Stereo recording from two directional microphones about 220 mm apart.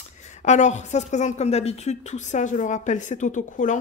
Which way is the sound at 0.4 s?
35° left (ahead or behind).